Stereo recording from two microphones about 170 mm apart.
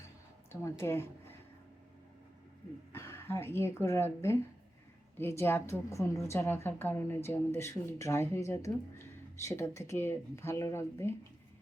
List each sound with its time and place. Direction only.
0.5 s a woman's voice: 15° left (ahead or behind)
2.9 s a woman's voice: 15° left (ahead or behind)